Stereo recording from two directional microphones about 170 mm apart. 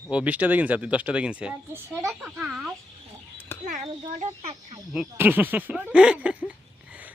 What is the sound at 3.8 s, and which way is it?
Speech, 35° right (ahead or behind).